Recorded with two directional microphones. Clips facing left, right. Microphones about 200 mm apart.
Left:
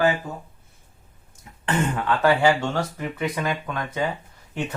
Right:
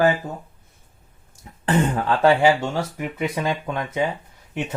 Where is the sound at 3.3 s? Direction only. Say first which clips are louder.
Right 2 dB; 25° right (ahead or behind).